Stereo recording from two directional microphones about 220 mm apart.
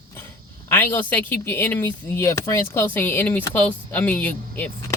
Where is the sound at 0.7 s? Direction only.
10° left (ahead or behind).